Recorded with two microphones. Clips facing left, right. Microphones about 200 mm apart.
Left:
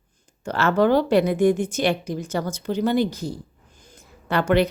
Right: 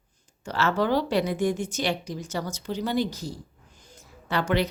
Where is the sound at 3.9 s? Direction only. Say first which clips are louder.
Left 4 dB; 55° left (ahead or behind).